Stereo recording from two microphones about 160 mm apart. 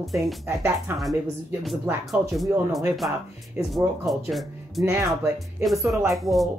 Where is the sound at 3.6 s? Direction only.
15° right (ahead or behind).